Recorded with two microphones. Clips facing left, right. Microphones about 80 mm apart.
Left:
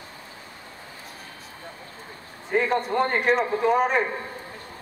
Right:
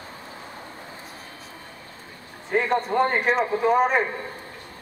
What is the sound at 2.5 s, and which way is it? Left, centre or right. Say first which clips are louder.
A man's voice: right 1 dB; centre.